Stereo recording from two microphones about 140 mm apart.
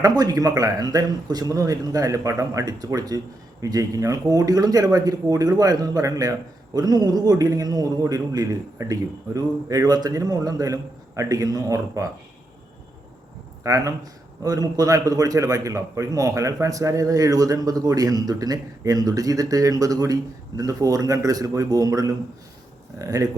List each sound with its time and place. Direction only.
0.0 s speech: 25° right (ahead or behind)
13.7 s speech: 25° right (ahead or behind)